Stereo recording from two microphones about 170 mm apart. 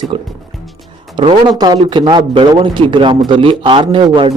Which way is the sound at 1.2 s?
25° right (ahead or behind).